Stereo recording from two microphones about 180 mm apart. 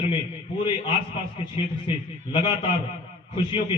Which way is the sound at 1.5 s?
25° left (ahead or behind).